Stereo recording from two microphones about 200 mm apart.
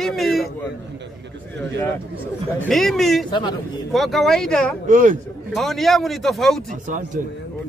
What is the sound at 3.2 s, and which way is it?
Speech, 20° left (ahead or behind).